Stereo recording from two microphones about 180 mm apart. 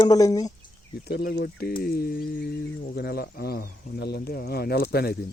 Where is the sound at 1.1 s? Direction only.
65° left (ahead or behind).